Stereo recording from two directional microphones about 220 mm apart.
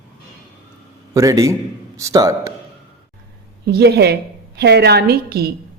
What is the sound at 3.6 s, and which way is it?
A woman's voice, 50° right (ahead or behind).